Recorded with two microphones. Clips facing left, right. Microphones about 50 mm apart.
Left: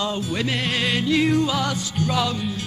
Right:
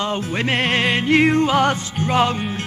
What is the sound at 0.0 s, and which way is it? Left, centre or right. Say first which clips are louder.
Music: right 3 dB; right.